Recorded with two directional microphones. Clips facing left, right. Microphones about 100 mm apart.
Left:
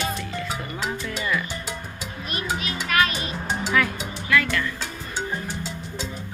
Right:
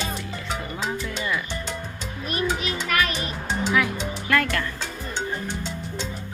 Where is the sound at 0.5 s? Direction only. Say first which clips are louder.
Right 4 dB; 5° left (ahead or behind).